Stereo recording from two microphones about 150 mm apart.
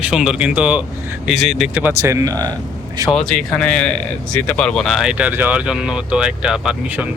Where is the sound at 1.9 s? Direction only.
20° right (ahead or behind).